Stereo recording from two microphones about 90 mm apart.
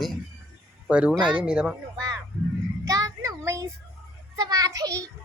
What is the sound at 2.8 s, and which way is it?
Child singing, 40° right (ahead or behind).